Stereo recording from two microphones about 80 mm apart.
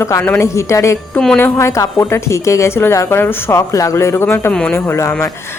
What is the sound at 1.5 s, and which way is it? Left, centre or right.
A woman's voice, left.